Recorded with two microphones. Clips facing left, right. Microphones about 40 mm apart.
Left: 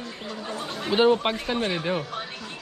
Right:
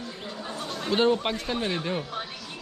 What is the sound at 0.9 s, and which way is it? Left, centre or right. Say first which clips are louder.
Speech: left 3 dB; centre.